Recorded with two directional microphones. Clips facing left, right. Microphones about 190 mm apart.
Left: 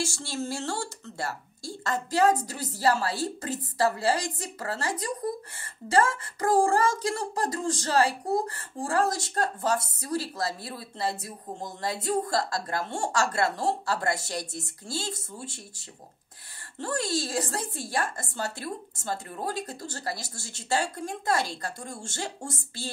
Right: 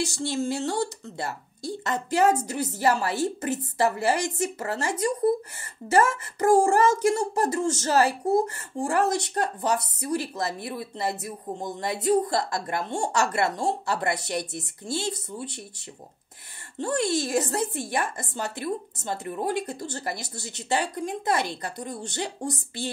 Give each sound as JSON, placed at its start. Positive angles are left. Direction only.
{"t": 0.0, "sound": "speech", "side_deg": -20}
{"t": 8.8, "sound": "speech", "side_deg": -20}
{"t": 16.7, "sound": "speech", "side_deg": -20}